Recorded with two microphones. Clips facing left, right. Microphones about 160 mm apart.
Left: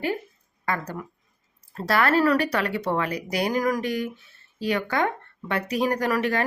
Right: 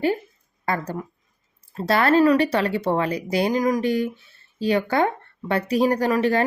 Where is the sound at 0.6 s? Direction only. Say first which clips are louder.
Right 3 dB; 30° right (ahead or behind).